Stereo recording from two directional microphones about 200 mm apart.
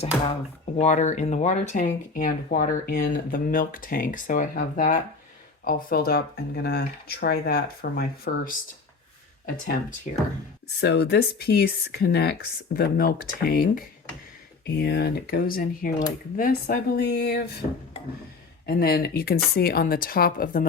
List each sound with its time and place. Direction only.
0.8 s speech: 35° left (ahead or behind)
10.1 s speech: 35° left (ahead or behind)
10.8 s speech: 55° left (ahead or behind)
18.6 s speech: 50° left (ahead or behind)